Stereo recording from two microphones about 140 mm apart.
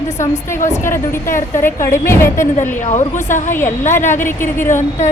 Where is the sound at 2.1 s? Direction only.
20° left (ahead or behind).